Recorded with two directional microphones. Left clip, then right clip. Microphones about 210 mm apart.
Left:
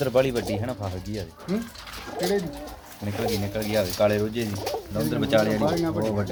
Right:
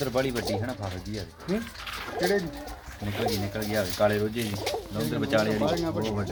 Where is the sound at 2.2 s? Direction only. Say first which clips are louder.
Left 1 dB; 10° right (ahead or behind).